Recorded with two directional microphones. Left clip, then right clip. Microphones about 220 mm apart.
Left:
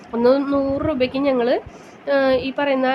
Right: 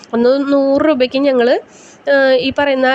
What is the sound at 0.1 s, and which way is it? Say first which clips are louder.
A woman's voice: right 5 dB; 30° right (ahead or behind).